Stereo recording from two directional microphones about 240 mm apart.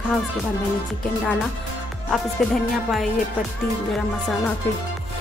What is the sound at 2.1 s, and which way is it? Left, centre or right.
A woman's voice, centre.